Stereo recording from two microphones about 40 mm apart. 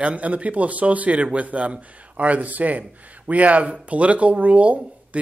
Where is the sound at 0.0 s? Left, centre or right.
Right.